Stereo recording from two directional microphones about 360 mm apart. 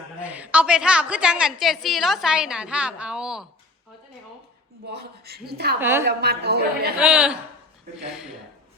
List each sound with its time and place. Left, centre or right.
0.2 s a woman's voice: centre
4.9 s a woman's voice: right
5.8 s a woman's voice: centre
6.1 s a woman's voice: right
7.0 s a woman's voice: centre